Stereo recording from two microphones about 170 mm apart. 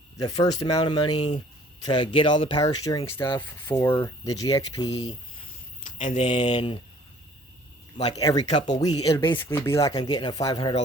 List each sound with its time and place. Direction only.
0.2 s speech: 20° left (ahead or behind)
3.8 s speech: 10° left (ahead or behind)
5.8 s speech: 45° left (ahead or behind)
7.9 s speech: 40° left (ahead or behind)
8.2 s speech: 20° left (ahead or behind)